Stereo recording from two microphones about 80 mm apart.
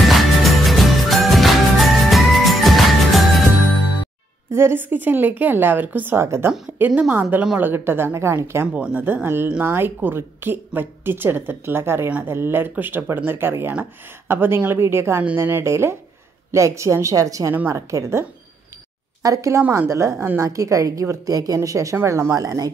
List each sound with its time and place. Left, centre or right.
0.0 s music: centre
4.5 s a woman's voice: right
6.2 s speech: right
7.0 s a woman's voice: centre
8.7 s speech: centre
9.0 s a woman's voice: right
19.2 s a woman's voice: right